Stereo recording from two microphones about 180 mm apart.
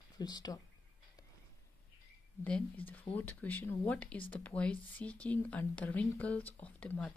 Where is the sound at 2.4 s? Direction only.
10° left (ahead or behind).